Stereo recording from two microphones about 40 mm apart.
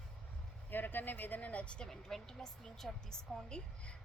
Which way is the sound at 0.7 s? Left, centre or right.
Left.